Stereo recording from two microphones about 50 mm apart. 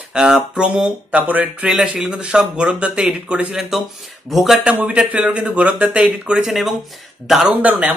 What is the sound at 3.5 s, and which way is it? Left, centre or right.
Speech, centre.